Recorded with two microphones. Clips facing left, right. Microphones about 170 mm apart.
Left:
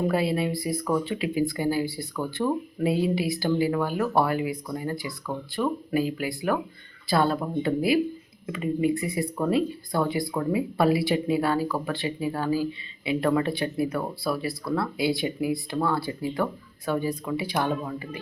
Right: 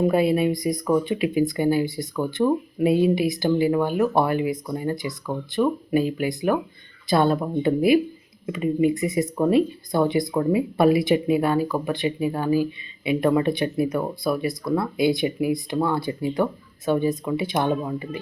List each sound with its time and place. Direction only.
0.1 s speech: 20° right (ahead or behind)